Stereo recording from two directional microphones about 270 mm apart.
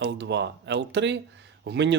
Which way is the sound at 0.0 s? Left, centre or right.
Right.